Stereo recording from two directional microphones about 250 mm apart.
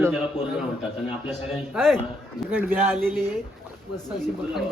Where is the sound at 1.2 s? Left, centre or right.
Centre.